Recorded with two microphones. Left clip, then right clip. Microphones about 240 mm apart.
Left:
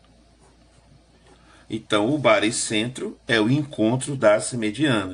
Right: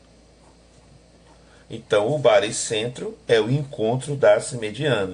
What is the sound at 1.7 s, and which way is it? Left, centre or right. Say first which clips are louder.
Speech: right 2 dB; left.